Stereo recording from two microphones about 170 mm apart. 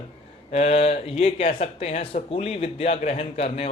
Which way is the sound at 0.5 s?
35° left (ahead or behind).